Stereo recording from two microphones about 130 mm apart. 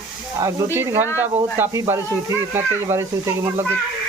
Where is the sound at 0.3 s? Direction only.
20° right (ahead or behind).